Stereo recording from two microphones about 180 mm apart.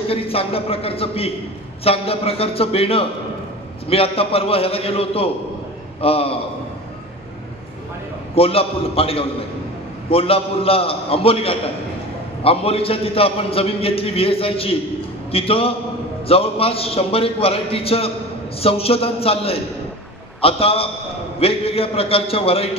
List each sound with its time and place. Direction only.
0.1 s a man's voice: 30° left (ahead or behind)
8.4 s a man's voice: 30° left (ahead or behind)